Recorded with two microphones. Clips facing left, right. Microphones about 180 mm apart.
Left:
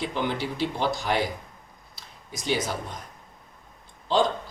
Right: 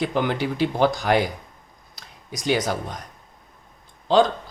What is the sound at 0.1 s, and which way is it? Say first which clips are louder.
Speech: right 5 dB; 55° right (ahead or behind).